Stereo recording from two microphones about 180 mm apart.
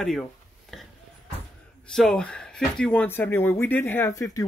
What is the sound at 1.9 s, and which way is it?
Speech, 5° left (ahead or behind).